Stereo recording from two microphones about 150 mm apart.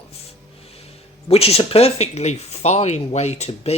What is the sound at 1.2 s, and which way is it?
Speech, 40° left (ahead or behind).